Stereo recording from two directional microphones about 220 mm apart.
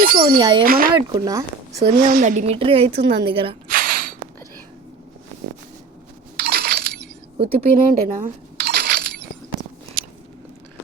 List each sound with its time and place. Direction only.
0.0 s speech: 45° right (ahead or behind)
0.3 s a woman's voice: 20° right (ahead or behind)
0.6 s speech: 40° right (ahead or behind)
0.9 s a woman's voice: 20° right (ahead or behind)
2.0 s a woman's voice: 40° right (ahead or behind)
3.7 s a sound: 40° right (ahead or behind)
6.3 s coin: 45° right (ahead or behind)
7.4 s a sound: 40° right (ahead or behind)